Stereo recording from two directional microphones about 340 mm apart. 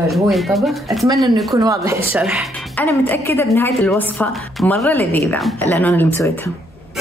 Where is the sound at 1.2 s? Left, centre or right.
Centre.